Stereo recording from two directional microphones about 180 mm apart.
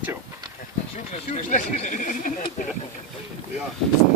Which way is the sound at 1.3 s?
45° left (ahead or behind).